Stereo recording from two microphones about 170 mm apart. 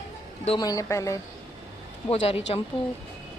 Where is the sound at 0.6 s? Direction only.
20° left (ahead or behind).